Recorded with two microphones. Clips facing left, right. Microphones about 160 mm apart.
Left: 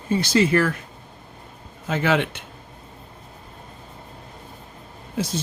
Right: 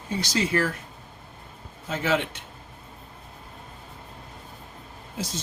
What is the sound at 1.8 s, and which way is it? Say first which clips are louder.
Speech: left 4 dB; 70° left (ahead or behind).